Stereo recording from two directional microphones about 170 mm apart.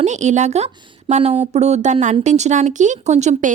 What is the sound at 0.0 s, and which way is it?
A woman's voice, 45° right (ahead or behind).